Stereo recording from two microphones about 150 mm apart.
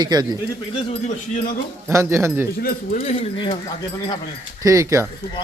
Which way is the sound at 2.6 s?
75° left (ahead or behind).